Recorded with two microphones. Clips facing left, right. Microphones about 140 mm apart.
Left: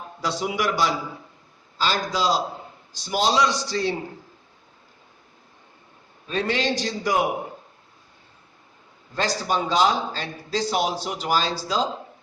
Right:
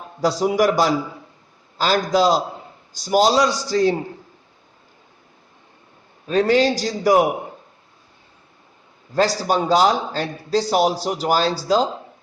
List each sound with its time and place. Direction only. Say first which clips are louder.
0.2 s a man's voice: right 8 dB; 40° right (ahead or behind)
6.2 s a man's voice: right 8 dB; 40° right (ahead or behind)
9.1 s a man's voice: right 6 dB; 40° right (ahead or behind)